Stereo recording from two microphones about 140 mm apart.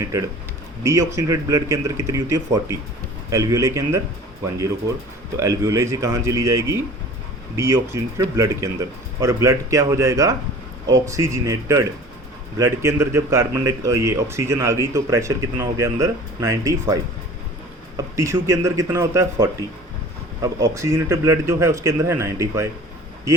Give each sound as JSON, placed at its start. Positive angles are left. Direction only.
{"t": 0.0, "sound": "a man's voice", "side_deg": -25}
{"t": 5.4, "sound": "a man's voice", "side_deg": -20}